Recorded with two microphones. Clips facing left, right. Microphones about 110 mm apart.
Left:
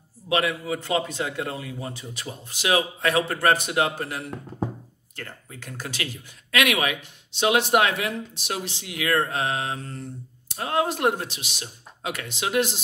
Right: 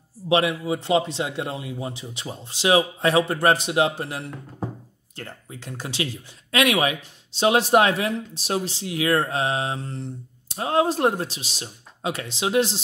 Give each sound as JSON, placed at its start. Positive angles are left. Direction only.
{"t": 0.3, "sound": "a man's voice", "side_deg": -25}